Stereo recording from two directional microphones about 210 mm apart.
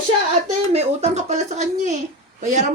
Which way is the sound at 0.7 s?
30° right (ahead or behind).